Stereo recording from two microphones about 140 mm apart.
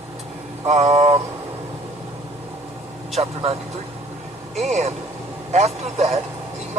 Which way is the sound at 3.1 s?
50° right (ahead or behind).